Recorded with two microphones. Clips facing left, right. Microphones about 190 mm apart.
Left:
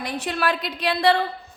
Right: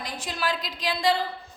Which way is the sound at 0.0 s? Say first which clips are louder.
Left 6 dB; 60° left (ahead or behind).